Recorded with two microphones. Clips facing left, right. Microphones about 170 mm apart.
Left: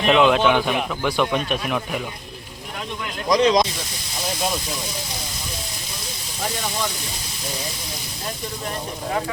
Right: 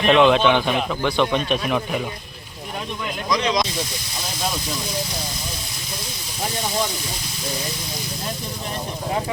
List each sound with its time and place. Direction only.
0.1 s speech: 5° left (ahead or behind)
3.2 s speech: 40° left (ahead or behind)